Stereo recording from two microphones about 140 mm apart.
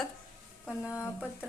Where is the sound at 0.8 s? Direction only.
20° left (ahead or behind).